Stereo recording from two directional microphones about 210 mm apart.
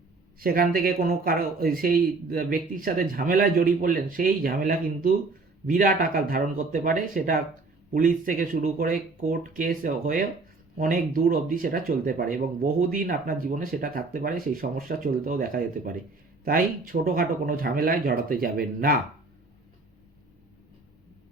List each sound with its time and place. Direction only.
0.3 s speech: 45° right (ahead or behind)